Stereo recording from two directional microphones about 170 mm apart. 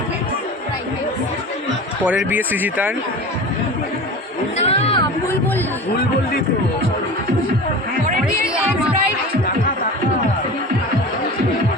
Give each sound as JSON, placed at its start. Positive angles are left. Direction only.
{"t": 2.0, "sound": "speech", "side_deg": -10}
{"t": 4.5, "sound": "chatter", "side_deg": 35}